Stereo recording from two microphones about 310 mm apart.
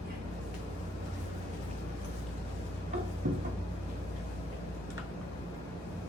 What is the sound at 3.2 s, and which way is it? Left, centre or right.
Cupboard open or close, right.